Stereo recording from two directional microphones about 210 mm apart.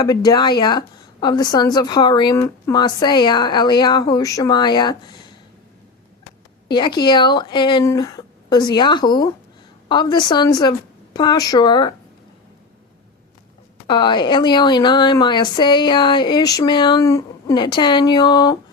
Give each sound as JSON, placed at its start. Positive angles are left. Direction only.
{"t": 0.0, "sound": "a woman's voice", "side_deg": 20}
{"t": 6.7, "sound": "a woman's voice", "side_deg": 20}
{"t": 13.8, "sound": "a woman's voice", "side_deg": 20}